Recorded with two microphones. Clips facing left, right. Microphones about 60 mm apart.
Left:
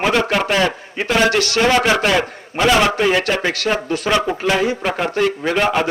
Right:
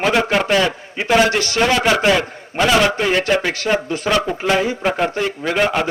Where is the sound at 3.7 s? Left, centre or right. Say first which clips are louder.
Even; centre.